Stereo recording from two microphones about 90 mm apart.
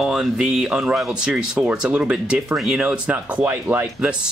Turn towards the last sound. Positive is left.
turn(degrees=-20)  # may be behind; listen again after turning